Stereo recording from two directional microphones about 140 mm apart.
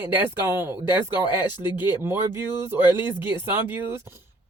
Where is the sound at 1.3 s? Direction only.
35° left (ahead or behind).